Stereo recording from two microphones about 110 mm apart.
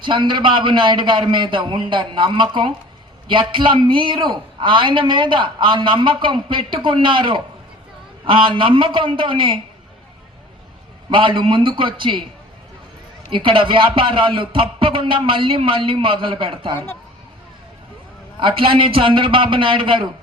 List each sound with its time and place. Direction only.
0.0 s a man's voice: 45° right (ahead or behind)
11.1 s a man's voice: 50° right (ahead or behind)
13.3 s a man's voice: 50° right (ahead or behind)
18.3 s a man's voice: 50° right (ahead or behind)